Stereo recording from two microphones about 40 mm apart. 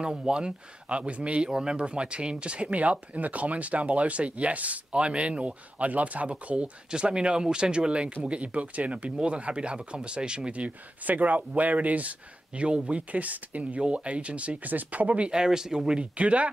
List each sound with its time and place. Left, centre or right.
0.0 s speech: right
15.3 s speech: centre
16.0 s speech: right